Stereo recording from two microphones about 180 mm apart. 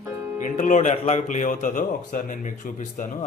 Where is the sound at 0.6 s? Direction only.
45° left (ahead or behind).